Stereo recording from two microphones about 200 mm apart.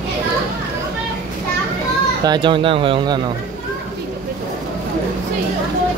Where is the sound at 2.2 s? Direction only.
25° right (ahead or behind).